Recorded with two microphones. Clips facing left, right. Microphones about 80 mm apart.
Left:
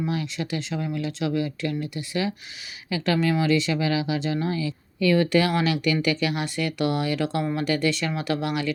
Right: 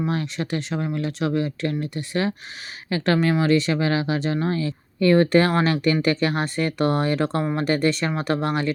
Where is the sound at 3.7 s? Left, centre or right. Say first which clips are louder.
Right 2 dB; right.